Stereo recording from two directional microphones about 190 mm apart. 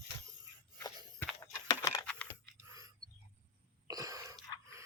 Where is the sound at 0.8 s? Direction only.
15° left (ahead or behind).